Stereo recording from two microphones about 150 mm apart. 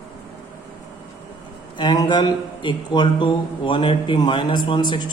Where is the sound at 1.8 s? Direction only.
30° left (ahead or behind).